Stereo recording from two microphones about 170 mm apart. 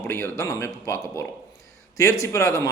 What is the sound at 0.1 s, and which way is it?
A man's voice, 15° left (ahead or behind).